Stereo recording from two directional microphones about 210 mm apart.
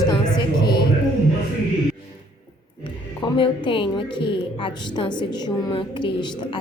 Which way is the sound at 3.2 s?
25° left (ahead or behind).